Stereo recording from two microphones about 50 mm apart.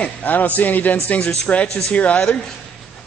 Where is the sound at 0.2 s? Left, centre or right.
Left.